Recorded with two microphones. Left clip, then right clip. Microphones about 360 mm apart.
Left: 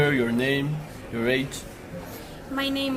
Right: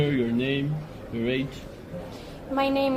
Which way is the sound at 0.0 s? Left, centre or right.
Left.